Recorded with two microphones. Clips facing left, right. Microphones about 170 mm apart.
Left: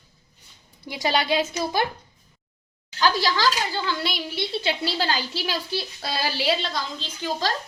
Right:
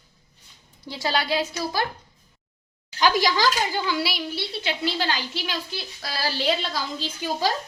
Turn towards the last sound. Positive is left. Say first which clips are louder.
# right 2 dB
turn(degrees=-10)  # may be behind; listen again after turning